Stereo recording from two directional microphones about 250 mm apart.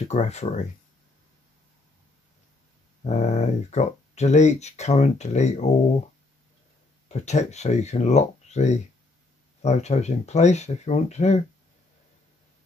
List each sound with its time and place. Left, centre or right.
0.0 s speech: left
3.0 s speech: left
7.1 s speech: left